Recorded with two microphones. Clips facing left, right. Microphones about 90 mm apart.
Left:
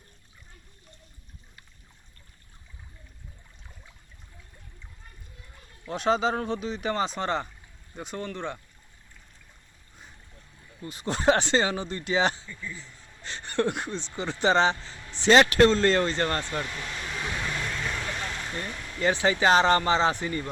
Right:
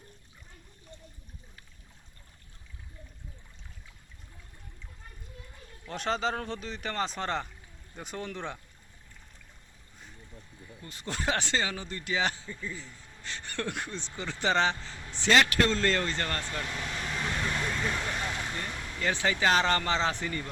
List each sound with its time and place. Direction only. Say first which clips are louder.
5.9 s speech: left 6 dB; 5° left (ahead or behind)
10.8 s speech: left 9 dB; 20° left (ahead or behind)
16.7 s vehicle: even; centre (ahead or behind)
18.9 s speech: left 5 dB; 20° left (ahead or behind)